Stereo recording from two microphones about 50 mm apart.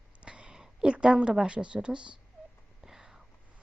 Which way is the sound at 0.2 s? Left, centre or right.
Right.